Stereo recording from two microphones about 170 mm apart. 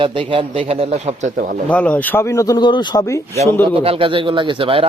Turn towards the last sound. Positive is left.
turn(degrees=-30)  # may be behind; listen again after turning